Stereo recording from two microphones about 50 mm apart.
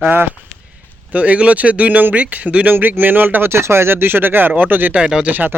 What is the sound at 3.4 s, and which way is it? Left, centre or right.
Speech, right.